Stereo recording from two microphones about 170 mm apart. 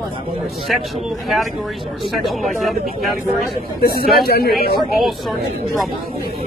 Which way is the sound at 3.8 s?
70° left (ahead or behind).